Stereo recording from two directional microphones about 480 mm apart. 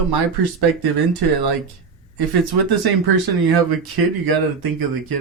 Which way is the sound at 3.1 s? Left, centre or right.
Right.